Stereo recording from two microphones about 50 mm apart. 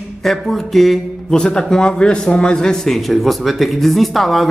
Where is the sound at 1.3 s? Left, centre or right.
Centre.